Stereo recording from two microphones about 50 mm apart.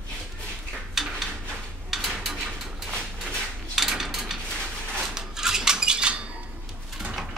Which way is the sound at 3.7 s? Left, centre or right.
Centre.